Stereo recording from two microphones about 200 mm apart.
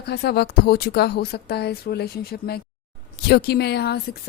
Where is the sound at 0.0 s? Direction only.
55° left (ahead or behind).